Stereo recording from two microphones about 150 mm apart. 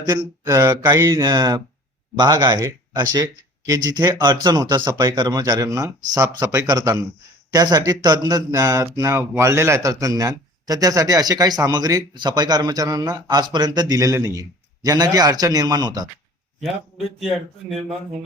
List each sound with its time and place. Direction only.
0.1 s speech: 20° right (ahead or behind)